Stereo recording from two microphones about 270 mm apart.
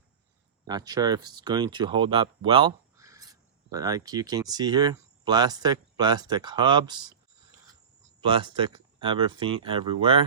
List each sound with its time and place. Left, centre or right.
0.7 s speech: centre
8.2 s speech: centre